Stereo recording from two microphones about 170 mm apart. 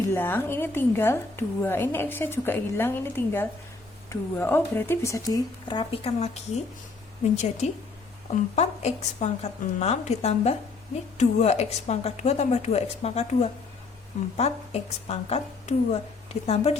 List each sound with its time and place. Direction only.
0.1 s a woman's voice: 15° left (ahead or behind); by 6.6 s 35° left (ahead or behind)
8.5 s a woman's voice: 40° left (ahead or behind)